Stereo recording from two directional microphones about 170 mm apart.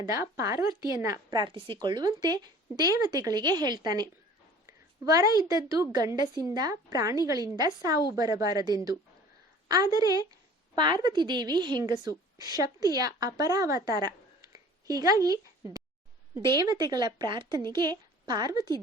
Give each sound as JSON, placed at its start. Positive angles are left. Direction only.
{"t": 0.1, "sound": "a woman's voice", "side_deg": -20}